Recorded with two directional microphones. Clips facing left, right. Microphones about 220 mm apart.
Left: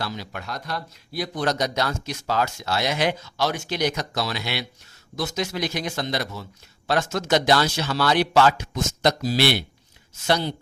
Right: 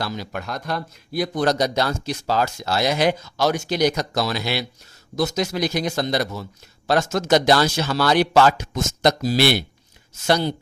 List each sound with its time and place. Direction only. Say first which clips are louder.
0.0 s speech: right 4 dB; 45° right (ahead or behind)